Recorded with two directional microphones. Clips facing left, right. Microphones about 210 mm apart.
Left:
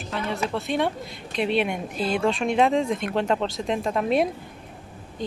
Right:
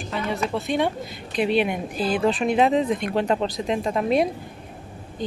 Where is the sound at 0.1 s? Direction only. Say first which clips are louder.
Right 1 dB; centre (ahead or behind).